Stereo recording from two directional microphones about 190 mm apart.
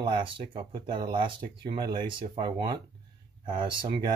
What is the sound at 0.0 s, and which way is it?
Speech, 25° right (ahead or behind).